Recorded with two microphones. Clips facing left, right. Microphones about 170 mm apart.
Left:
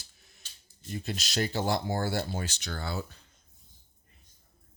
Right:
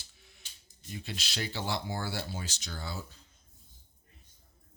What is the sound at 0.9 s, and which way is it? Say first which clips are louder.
Speech: left 5 dB; 45° left (ahead or behind).